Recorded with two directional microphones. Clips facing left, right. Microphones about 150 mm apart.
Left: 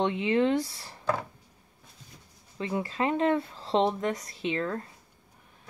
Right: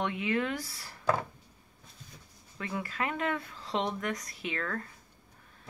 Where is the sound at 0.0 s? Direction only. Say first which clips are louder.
Left 6 dB; 25° left (ahead or behind).